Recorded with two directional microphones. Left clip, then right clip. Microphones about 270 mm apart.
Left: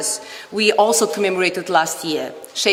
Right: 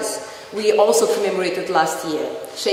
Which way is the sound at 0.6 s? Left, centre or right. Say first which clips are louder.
Even; left.